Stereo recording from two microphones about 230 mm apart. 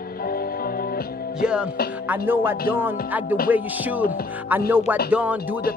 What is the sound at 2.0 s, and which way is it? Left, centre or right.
Music, centre.